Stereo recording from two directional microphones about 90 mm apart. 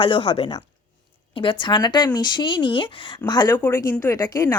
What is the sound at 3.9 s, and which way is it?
Speech, 35° left (ahead or behind).